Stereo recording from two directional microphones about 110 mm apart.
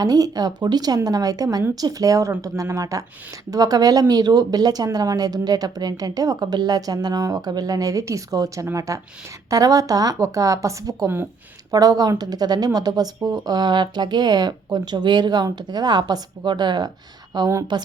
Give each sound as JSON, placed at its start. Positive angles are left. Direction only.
{"t": 0.0, "sound": "a woman's voice", "side_deg": -35}